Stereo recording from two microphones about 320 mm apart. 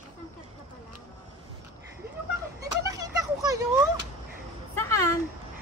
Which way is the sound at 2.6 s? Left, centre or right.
Centre.